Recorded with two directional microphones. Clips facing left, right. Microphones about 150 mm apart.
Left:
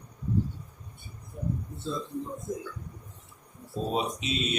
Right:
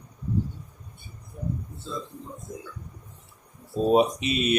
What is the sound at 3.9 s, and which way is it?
Speech, 60° right (ahead or behind).